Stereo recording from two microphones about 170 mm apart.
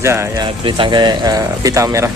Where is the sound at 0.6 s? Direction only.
30° right (ahead or behind).